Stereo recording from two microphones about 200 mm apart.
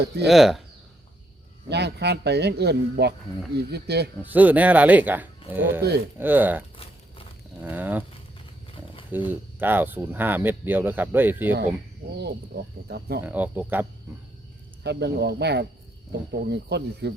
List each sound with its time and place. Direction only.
0.3 s speech: centre (ahead or behind)
1.7 s speech: 55° right (ahead or behind)
4.2 s speech: 10° right (ahead or behind)
7.6 s speech: 10° right (ahead or behind)
9.0 s speech: 10° right (ahead or behind)
12.9 s speech: 55° right (ahead or behind)
13.2 s speech: 10° right (ahead or behind)
14.8 s speech: 55° right (ahead or behind)